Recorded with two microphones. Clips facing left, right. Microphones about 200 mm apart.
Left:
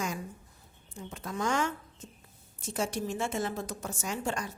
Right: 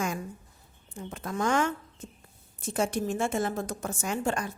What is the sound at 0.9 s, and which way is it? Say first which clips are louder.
A woman's voice: right 3 dB; 55° right (ahead or behind).